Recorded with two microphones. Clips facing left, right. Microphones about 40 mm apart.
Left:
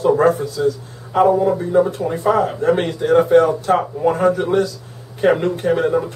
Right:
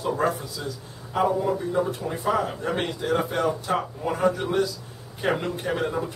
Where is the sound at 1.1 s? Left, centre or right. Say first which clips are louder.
Left 9 dB; left.